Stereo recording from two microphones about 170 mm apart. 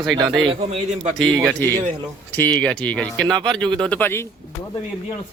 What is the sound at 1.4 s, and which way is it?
Speech, 5° left (ahead or behind).